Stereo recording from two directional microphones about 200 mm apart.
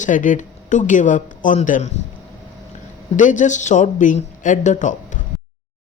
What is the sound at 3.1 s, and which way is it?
Speech, 40° left (ahead or behind).